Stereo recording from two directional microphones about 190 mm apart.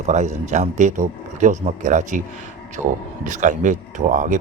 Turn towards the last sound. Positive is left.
turn(degrees=-45)  # may be behind; listen again after turning